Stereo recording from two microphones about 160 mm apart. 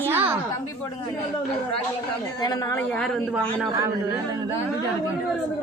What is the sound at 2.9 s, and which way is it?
Speech, 5° left (ahead or behind).